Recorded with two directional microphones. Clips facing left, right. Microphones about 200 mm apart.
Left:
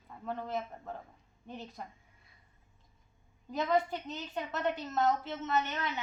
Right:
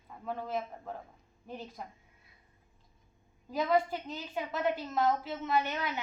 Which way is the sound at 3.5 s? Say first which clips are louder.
Right 1 dB; 5° right (ahead or behind).